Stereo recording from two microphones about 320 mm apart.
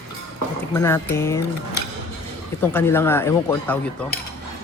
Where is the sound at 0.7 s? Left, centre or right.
Centre.